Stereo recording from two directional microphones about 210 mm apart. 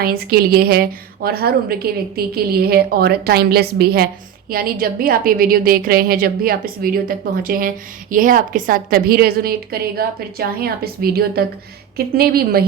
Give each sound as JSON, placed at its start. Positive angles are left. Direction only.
{"t": 0.0, "sound": "a woman's voice", "side_deg": -45}